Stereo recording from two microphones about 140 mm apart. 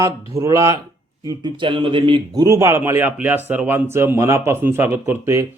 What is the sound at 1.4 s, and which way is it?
A man's voice, 35° right (ahead or behind).